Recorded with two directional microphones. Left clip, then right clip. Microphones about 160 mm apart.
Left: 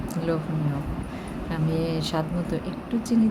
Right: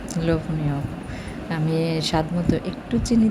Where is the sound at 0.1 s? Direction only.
25° right (ahead or behind).